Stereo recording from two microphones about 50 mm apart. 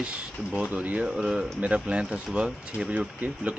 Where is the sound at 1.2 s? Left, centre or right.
Centre.